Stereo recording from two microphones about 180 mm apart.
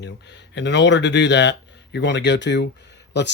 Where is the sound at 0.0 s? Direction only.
75° left (ahead or behind).